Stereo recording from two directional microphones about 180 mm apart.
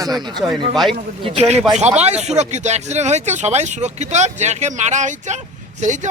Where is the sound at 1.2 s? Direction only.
30° right (ahead or behind).